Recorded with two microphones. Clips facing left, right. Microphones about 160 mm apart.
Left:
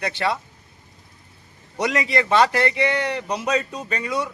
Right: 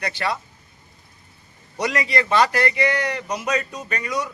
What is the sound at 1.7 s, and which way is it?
A man's voice, 20° left (ahead or behind).